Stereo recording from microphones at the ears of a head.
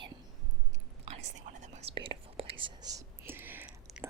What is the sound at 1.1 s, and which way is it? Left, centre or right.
Whispering, right.